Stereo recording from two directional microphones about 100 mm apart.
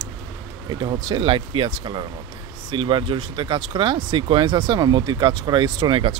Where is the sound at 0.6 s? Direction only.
50° right (ahead or behind).